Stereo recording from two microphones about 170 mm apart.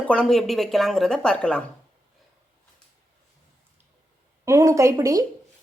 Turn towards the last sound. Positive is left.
turn(degrees=-20)  # may be behind; listen again after turning